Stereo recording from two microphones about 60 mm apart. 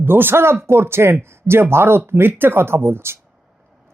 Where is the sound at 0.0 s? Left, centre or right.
Right.